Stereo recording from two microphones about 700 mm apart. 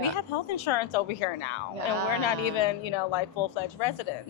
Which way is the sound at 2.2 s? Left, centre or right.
Left.